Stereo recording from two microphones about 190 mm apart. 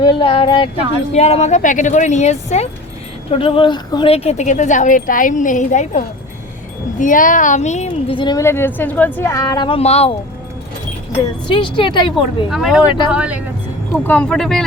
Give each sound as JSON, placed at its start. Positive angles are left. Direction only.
{"t": 0.0, "sound": "a woman's voice", "side_deg": 25}
{"t": 11.4, "sound": "a woman's voice", "side_deg": 25}
{"t": 12.5, "sound": "speech", "side_deg": -5}
{"t": 12.8, "sound": "a woman's voice", "side_deg": 25}
{"t": 13.1, "sound": "speech", "side_deg": -5}
{"t": 13.9, "sound": "speech", "side_deg": 10}